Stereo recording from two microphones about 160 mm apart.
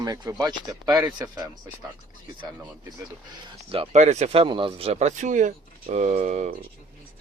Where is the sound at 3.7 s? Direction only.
40° right (ahead or behind).